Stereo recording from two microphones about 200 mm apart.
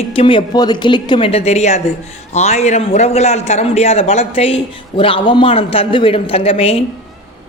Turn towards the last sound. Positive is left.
turn(degrees=30)  # may be behind; listen again after turning